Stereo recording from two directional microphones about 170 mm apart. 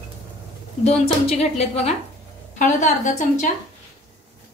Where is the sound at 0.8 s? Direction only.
35° left (ahead or behind).